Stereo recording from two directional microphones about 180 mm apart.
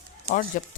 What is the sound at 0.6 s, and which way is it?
Speech, 50° left (ahead or behind).